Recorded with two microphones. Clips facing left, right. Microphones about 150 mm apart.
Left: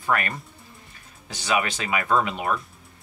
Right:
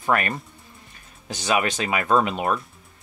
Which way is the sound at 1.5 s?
30° right (ahead or behind).